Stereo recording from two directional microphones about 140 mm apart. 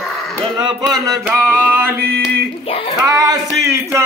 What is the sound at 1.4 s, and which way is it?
Speech, 15° right (ahead or behind).